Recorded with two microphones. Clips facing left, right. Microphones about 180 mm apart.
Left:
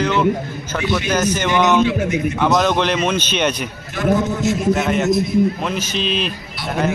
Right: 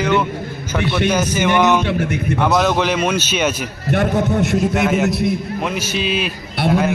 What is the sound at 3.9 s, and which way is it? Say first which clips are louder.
Speech: right 1 dB; 65° right (ahead or behind).